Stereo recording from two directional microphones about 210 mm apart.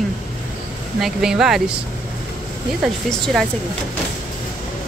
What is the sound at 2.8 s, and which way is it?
Speech, centre (ahead or behind).